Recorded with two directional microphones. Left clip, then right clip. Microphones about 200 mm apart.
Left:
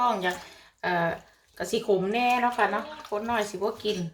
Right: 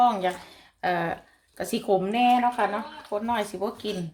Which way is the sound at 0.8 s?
45° right (ahead or behind).